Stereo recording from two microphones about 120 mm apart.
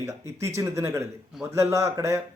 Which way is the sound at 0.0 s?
25° right (ahead or behind).